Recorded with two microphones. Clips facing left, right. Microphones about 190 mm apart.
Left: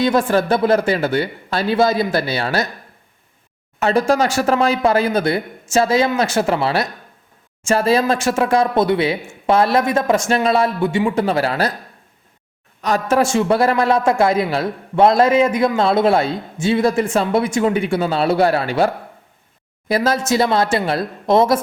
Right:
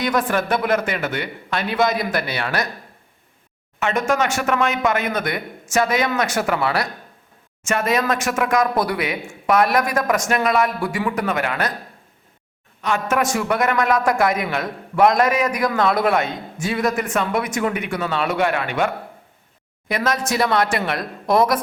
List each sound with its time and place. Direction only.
0.0 s a man's voice: 30° left (ahead or behind)
3.8 s a man's voice: 35° left (ahead or behind)
12.8 s a man's voice: 35° left (ahead or behind)
19.9 s a man's voice: 30° left (ahead or behind)